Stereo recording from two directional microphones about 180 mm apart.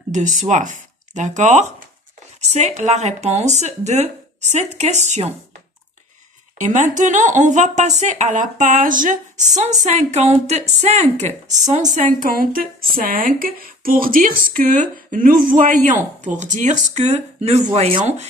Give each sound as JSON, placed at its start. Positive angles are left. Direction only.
{"t": 0.1, "sound": "speech", "side_deg": -45}
{"t": 6.6, "sound": "speech", "side_deg": -45}